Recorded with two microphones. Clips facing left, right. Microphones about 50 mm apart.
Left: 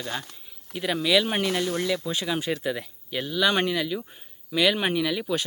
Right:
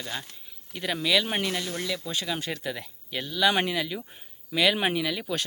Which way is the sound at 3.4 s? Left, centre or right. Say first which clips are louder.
Even; centre.